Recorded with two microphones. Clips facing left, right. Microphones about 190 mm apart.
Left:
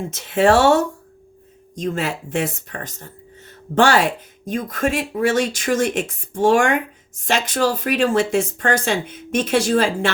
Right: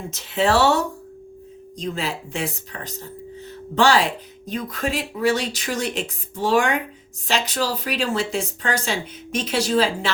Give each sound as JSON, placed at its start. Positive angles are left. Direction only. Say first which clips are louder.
{"t": 0.1, "sound": "speech", "louder": "left 5 dB", "side_deg": 50}
{"t": 1.8, "sound": "speech", "louder": "left 4 dB", "side_deg": 50}